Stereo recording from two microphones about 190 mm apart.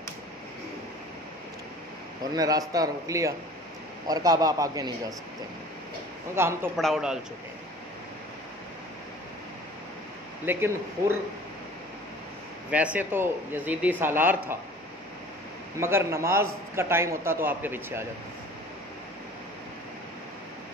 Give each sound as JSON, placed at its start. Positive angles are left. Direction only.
{"t": 2.3, "sound": "a man's voice", "side_deg": -20}
{"t": 6.3, "sound": "speech", "side_deg": -10}
{"t": 6.8, "sound": "speech", "side_deg": 0}
{"t": 10.4, "sound": "speech", "side_deg": -10}
{"t": 12.7, "sound": "speech", "side_deg": -5}
{"t": 15.8, "sound": "speech", "side_deg": -15}